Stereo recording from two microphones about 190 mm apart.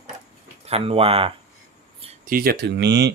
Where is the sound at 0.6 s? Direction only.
30° right (ahead or behind).